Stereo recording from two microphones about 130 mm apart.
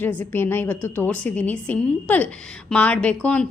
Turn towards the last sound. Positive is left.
turn(degrees=10)  # may be behind; listen again after turning